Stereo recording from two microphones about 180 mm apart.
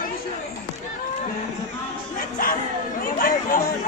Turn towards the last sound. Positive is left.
turn(degrees=50)  # may be behind; listen again after turning